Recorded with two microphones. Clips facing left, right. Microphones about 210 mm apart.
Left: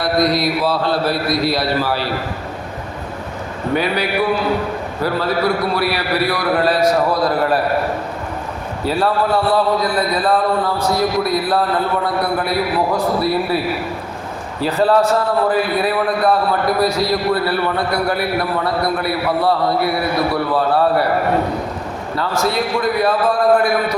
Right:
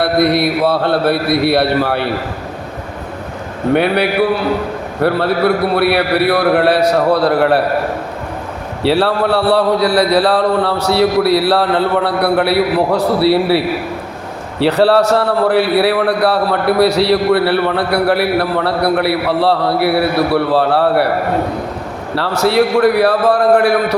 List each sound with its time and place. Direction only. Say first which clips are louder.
0.0 s a man's voice: right 4 dB; 60° right (ahead or behind)
3.8 s a man's voice: right 5 dB; 65° right (ahead or behind)
8.8 s a man's voice: right 4 dB; 75° right (ahead or behind)
14.6 s a man's voice: right 4 dB; 75° right (ahead or behind)
22.1 s a man's voice: right 5 dB; 70° right (ahead or behind)